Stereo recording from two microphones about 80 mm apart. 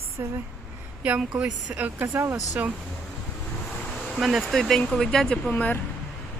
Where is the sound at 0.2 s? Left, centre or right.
Right.